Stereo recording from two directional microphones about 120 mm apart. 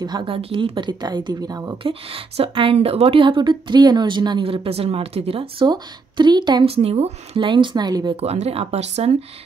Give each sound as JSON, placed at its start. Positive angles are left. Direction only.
{"t": 0.0, "sound": "a woman's voice", "side_deg": -40}
{"t": 1.8, "sound": "a woman's voice", "side_deg": -50}
{"t": 5.7, "sound": "a woman's voice", "side_deg": -40}
{"t": 6.6, "sound": "a woman's voice", "side_deg": -55}
{"t": 8.2, "sound": "speech", "side_deg": -60}